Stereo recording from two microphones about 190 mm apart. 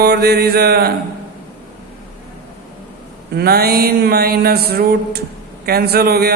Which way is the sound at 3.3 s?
55° right (ahead or behind).